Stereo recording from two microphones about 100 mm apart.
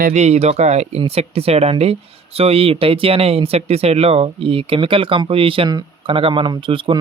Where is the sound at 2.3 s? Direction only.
75° right (ahead or behind).